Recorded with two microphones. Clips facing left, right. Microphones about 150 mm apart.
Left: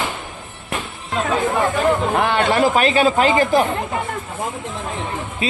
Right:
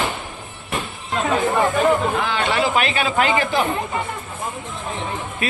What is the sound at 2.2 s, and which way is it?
A man's voice, 55° left (ahead or behind).